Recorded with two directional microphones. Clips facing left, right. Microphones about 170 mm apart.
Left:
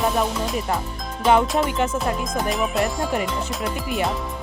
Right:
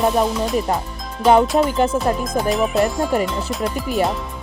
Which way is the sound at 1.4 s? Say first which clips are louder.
Right 5 dB; centre (ahead or behind).